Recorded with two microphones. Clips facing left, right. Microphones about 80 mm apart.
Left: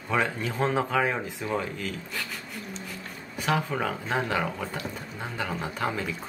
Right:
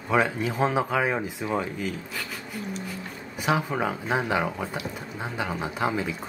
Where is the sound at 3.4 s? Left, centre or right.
Centre.